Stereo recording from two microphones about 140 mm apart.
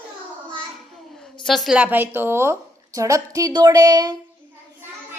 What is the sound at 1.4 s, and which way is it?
A woman's voice, centre (ahead or behind).